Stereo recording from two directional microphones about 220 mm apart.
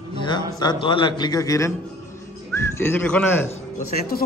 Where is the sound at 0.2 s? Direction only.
20° left (ahead or behind).